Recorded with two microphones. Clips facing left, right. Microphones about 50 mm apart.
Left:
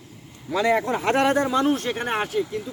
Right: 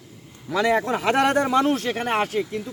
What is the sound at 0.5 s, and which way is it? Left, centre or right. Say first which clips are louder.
A man's voice: even; right.